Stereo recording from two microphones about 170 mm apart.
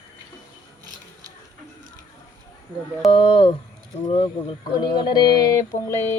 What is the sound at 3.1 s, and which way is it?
A man's voice, 35° left (ahead or behind).